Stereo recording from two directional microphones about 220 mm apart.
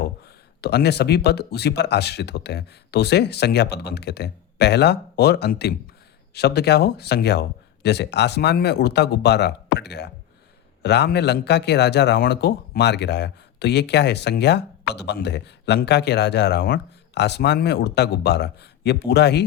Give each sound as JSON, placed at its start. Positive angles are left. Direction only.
{"t": 0.3, "sound": "speech", "side_deg": 45}